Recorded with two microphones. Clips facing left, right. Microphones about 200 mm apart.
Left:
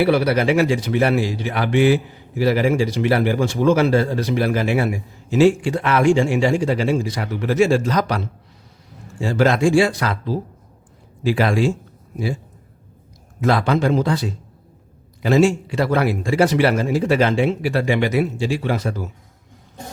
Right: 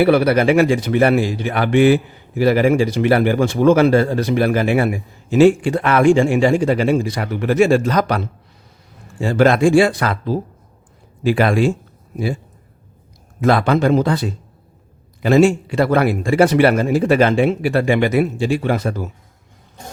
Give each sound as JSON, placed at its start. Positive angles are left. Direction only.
{"t": 0.0, "sound": "speech", "side_deg": -55}
{"t": 9.2, "sound": "speech", "side_deg": -55}
{"t": 13.4, "sound": "speech", "side_deg": -55}